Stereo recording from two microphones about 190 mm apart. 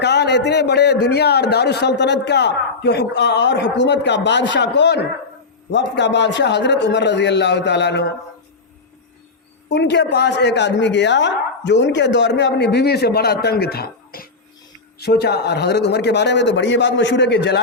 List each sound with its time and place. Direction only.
0.0 s speech: 65° left (ahead or behind)
9.6 s speech: 65° left (ahead or behind)